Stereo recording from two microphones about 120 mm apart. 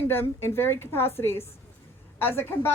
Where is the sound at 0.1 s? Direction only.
20° left (ahead or behind).